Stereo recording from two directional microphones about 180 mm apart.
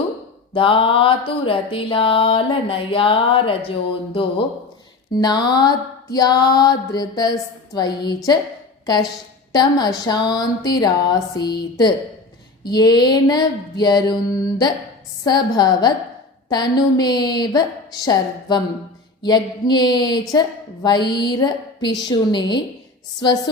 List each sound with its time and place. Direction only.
0.5 s mantra: 30° left (ahead or behind)
9.5 s mantra: 25° left (ahead or behind)